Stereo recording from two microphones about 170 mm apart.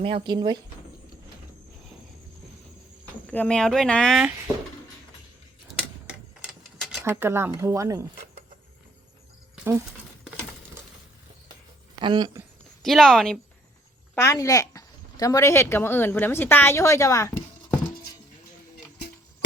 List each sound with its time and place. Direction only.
0.0 s speech: 30° right (ahead or behind)
3.2 s speech: 5° left (ahead or behind)
5.7 s a sound: centre (ahead or behind)
7.0 s speech: 15° right (ahead or behind)
11.9 s speech: 25° right (ahead or behind)
12.8 s speech: centre (ahead or behind)
14.2 s speech: 15° left (ahead or behind)